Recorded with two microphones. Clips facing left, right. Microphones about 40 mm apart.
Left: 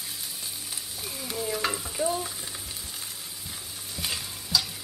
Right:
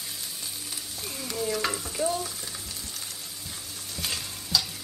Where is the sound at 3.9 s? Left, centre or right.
Centre.